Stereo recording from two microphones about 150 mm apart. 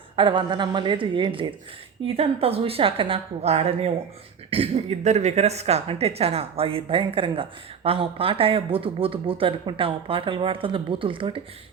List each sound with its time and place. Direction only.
0.2 s speech: 30° right (ahead or behind)